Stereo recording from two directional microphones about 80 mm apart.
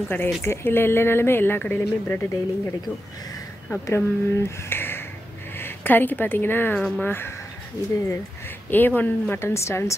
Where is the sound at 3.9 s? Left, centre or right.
Left.